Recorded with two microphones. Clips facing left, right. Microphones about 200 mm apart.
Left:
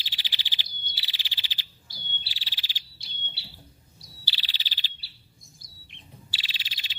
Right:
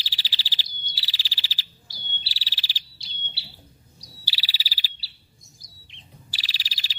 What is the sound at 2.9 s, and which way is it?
Bird, 55° left (ahead or behind).